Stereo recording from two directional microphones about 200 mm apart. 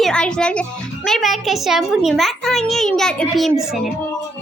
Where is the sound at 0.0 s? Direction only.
5° left (ahead or behind).